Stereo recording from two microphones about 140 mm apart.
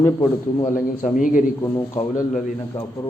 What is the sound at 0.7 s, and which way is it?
Speech, 70° left (ahead or behind).